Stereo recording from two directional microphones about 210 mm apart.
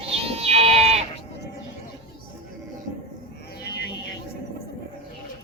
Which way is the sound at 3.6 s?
50° left (ahead or behind).